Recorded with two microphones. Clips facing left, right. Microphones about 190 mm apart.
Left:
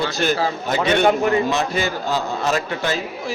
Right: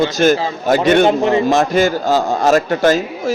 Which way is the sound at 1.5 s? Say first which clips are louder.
Right 8 dB; 45° right (ahead or behind).